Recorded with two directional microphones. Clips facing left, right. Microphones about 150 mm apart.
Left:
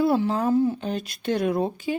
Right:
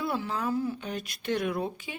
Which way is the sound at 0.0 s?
35° left (ahead or behind).